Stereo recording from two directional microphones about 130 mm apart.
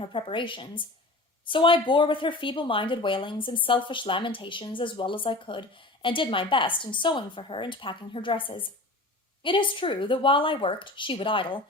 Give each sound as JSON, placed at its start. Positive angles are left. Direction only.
{"t": 0.0, "sound": "a woman's voice", "side_deg": 40}